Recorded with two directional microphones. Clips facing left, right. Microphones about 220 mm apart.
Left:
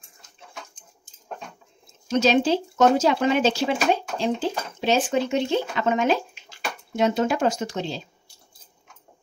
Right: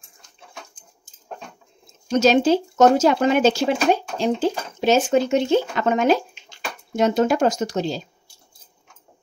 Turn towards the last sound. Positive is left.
turn(degrees=-40)  # may be behind; listen again after turning